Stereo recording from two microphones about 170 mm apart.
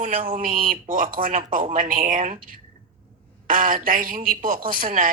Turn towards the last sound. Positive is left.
turn(degrees=-55)  # may be behind; listen again after turning